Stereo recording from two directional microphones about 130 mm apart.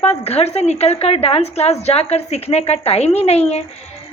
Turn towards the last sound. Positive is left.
turn(degrees=55)  # may be behind; listen again after turning